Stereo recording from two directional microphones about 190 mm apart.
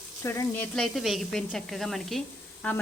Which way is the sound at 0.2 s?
15° left (ahead or behind).